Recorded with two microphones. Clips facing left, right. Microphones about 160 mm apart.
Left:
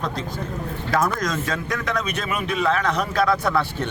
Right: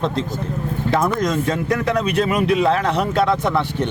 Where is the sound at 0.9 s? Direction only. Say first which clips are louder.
Right 4 dB; 25° right (ahead or behind).